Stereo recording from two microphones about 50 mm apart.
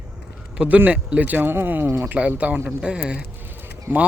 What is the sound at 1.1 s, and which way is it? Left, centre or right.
Speech, right.